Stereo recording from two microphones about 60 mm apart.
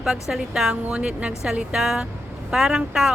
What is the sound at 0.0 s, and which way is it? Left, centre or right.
Speech, centre.